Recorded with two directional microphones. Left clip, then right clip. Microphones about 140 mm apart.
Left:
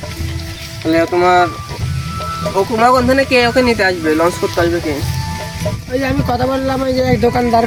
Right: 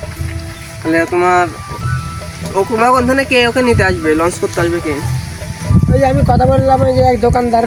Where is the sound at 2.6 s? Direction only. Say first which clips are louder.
Right 1 dB; 5° right (ahead or behind).